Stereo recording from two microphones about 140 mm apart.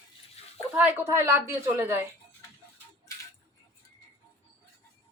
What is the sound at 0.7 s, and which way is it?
Speech, 10° right (ahead or behind).